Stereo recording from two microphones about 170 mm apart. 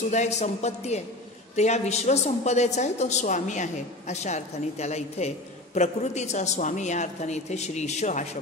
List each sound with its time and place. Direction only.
0.1 s a woman's voice: 40° left (ahead or behind)